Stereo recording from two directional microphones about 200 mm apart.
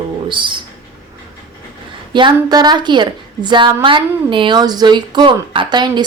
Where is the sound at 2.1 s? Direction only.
20° right (ahead or behind).